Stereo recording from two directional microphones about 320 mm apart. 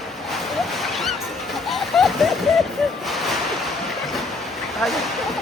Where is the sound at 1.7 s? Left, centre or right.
Centre.